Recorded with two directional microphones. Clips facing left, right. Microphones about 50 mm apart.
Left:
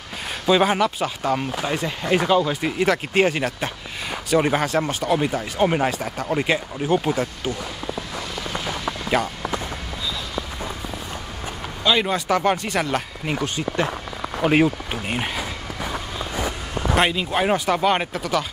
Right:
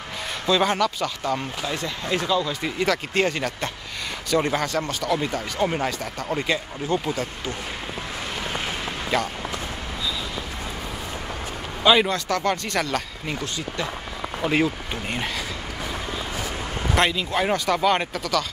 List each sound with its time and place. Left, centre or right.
0.5 s speech: centre
2.6 s speech: centre
9.1 s speech: centre
11.8 s speech: centre
12.1 s speech: centre
13.3 s speech: left
14.4 s a sound: left
16.3 s a sound: left
17.1 s speech: centre